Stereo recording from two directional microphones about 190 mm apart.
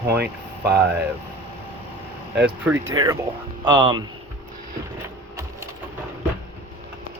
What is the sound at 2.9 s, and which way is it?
Speech, 20° right (ahead or behind).